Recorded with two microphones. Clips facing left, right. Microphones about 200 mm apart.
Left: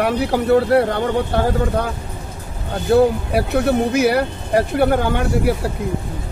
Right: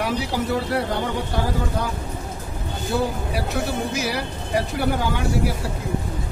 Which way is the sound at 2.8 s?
60° left (ahead or behind).